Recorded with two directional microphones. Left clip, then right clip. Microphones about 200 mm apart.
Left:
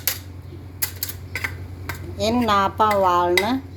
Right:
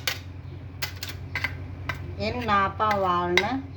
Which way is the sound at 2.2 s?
50° left (ahead or behind).